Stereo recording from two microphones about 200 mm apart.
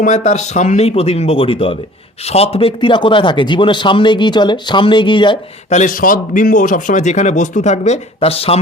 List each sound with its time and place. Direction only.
0.0 s a man's voice: 35° left (ahead or behind)
5.7 s a man's voice: 40° left (ahead or behind)